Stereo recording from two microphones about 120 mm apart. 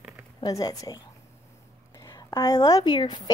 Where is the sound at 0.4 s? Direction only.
30° left (ahead or behind).